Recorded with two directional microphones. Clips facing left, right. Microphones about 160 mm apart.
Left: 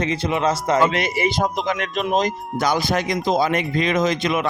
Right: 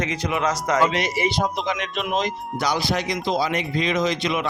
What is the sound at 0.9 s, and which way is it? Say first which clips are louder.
Speech: left 2 dB; 55° left (ahead or behind).